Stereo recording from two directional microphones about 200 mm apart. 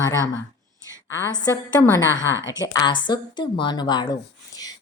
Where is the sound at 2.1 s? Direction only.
65° left (ahead or behind).